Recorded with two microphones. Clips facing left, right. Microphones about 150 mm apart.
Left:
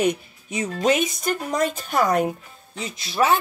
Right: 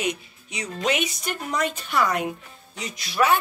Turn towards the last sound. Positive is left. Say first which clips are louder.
# left 1 dB
turn(degrees=25)  # may be behind; listen again after turning